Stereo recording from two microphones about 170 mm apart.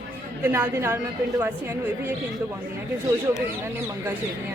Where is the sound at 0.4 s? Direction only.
15° right (ahead or behind).